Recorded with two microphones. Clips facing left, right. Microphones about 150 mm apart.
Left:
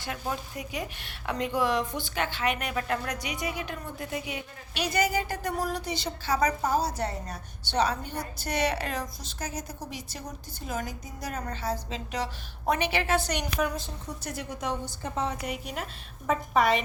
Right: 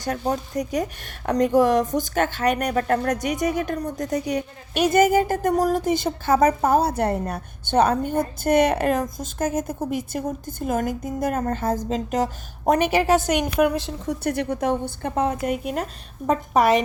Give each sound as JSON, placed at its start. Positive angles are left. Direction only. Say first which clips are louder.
{"t": 0.0, "sound": "speech", "louder": "right 9 dB", "side_deg": -40}